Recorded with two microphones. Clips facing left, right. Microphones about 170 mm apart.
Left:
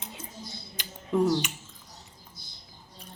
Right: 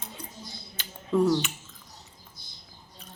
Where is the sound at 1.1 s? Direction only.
15° left (ahead or behind).